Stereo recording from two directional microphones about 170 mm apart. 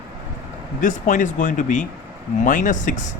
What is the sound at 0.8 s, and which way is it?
Speech, 50° left (ahead or behind).